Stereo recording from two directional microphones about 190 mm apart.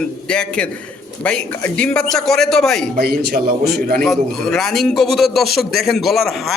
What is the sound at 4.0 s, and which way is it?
Speech, centre (ahead or behind).